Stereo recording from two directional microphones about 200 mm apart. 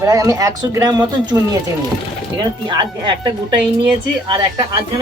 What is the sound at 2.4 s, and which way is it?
Speech, 20° right (ahead or behind).